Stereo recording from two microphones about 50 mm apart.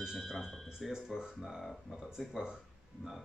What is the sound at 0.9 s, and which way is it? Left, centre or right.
Speech, centre.